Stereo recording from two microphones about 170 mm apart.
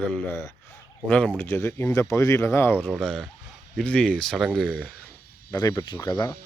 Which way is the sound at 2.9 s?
5° left (ahead or behind).